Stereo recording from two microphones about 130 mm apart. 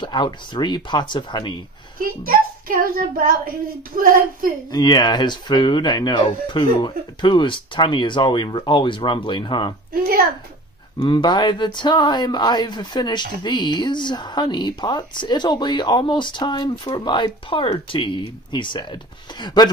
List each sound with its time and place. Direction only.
0.0 s speech: 35° left (ahead or behind)
2.0 s a child's voice: 90° right
4.7 s speech: 30° left (ahead or behind)
11.0 s speech: 35° left (ahead or behind)